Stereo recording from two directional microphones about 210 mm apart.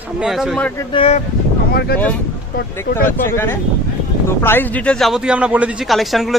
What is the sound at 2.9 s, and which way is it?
Speech, 10° left (ahead or behind).